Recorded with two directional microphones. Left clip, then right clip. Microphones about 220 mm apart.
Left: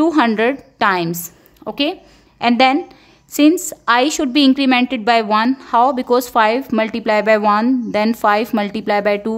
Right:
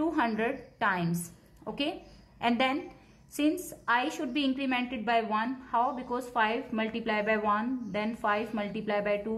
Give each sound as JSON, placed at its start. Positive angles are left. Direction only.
{"t": 0.0, "sound": "a woman's voice", "side_deg": 50}